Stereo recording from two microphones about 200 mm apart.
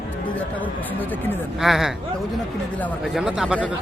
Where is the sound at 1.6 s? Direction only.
Centre (ahead or behind).